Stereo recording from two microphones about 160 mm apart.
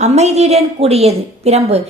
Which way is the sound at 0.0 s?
45° right (ahead or behind).